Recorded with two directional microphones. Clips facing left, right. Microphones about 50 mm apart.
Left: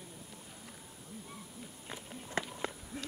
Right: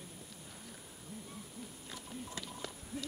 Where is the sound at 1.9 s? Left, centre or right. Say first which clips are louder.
Left 7 dB; left.